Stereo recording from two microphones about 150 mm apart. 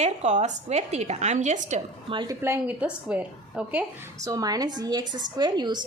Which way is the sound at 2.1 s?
30° right (ahead or behind).